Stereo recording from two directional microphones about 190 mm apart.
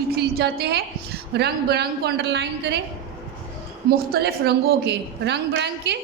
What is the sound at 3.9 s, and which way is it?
A woman's voice, 55° right (ahead or behind).